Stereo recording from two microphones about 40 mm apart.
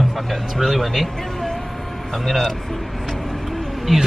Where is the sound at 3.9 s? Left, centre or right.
Centre.